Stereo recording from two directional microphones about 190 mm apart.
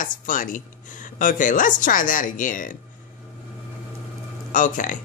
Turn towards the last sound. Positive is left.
turn(degrees=45)  # may be behind; listen again after turning